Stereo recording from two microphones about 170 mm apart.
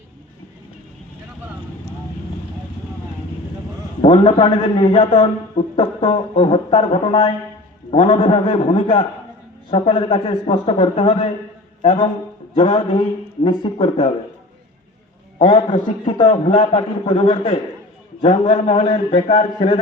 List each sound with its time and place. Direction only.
4.0 s a man's voice: 30° left (ahead or behind)
15.4 s a man's voice: 30° left (ahead or behind)